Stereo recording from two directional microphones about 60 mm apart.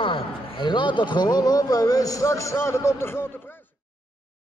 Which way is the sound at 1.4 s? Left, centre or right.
Left.